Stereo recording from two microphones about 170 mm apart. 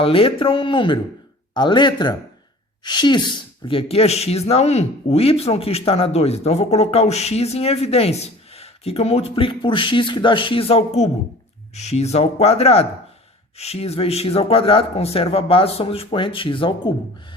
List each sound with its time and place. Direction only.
0.0 s speech: 30° left (ahead or behind)